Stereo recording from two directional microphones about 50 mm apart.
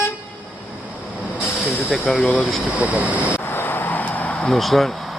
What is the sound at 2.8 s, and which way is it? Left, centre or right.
Speech, right.